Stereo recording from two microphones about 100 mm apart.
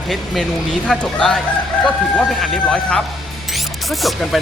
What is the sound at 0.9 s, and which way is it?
Speech, 5° left (ahead or behind).